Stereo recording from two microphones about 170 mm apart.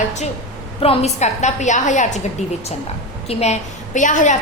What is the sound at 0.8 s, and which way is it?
A woman's voice, 35° left (ahead or behind).